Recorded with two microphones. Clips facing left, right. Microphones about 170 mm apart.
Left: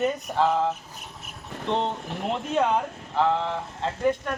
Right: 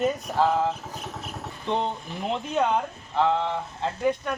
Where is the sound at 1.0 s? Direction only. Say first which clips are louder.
Right 7 dB; 85° right.